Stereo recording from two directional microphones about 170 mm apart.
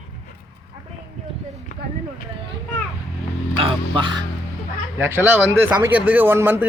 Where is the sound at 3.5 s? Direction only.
30° right (ahead or behind).